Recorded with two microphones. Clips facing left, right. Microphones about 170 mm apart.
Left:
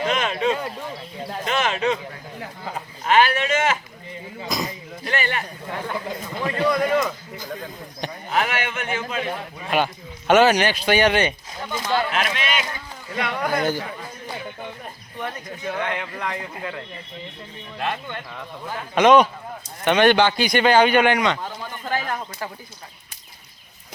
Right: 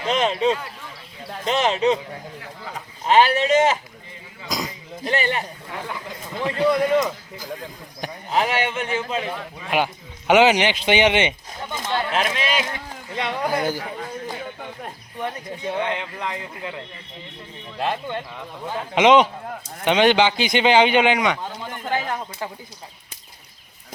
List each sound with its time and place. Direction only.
0.1 s speech: 30° right (ahead or behind)
3.0 s speech: 30° right (ahead or behind)
5.0 s speech: 25° right (ahead or behind)
7.0 s a man's voice: 10° right (ahead or behind)
8.3 s speech: 30° right (ahead or behind)
9.6 s speech: 15° right (ahead or behind)
13.5 s a man's voice: 10° right (ahead or behind)
15.2 s speech: 25° right (ahead or behind)
17.7 s a man's voice: 30° right (ahead or behind)